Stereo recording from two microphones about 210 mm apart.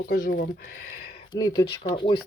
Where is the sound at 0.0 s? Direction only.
45° left (ahead or behind).